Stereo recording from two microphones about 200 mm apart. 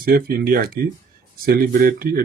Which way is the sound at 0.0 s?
45° right (ahead or behind).